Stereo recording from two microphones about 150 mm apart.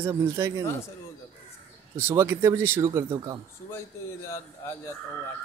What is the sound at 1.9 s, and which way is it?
A man's voice, 15° right (ahead or behind).